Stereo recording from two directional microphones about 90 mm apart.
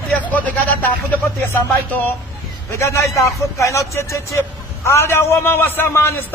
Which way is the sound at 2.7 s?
35° left (ahead or behind).